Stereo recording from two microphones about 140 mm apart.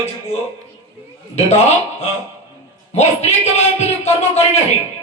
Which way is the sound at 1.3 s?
50° left (ahead or behind).